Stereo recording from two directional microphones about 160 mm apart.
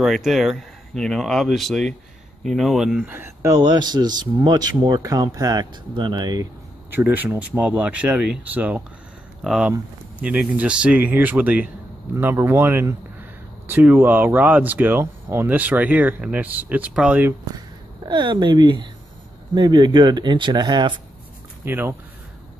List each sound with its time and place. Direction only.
0.0 s speech: centre (ahead or behind)
3.1 s speech: 15° right (ahead or behind)
6.9 s speech: 10° right (ahead or behind)
17.6 s speech: 30° right (ahead or behind)
21.6 s speech: 15° right (ahead or behind)